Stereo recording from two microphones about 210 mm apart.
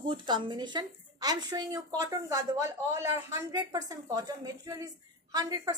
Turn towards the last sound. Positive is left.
turn(degrees=-15)  # may be behind; listen again after turning